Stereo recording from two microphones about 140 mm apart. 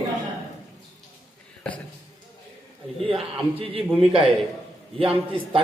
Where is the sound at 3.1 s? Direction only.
40° right (ahead or behind).